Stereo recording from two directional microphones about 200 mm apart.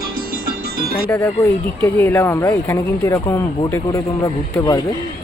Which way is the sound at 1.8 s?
10° left (ahead or behind).